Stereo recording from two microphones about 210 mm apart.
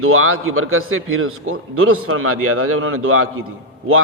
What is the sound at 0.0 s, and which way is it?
A man's voice, 85° right.